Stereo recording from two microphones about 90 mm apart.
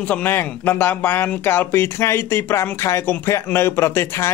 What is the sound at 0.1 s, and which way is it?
Speech, 20° left (ahead or behind).